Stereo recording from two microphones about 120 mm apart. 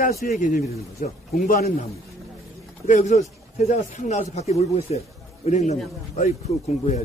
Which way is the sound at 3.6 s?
70° left (ahead or behind).